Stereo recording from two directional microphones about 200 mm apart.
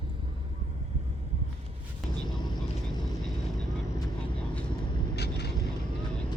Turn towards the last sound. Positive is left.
turn(degrees=55)  # may be behind; listen again after turning